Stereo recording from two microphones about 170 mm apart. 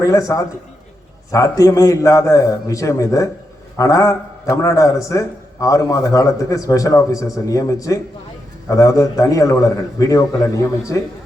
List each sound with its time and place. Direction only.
0.0 s a man's voice: 20° left (ahead or behind)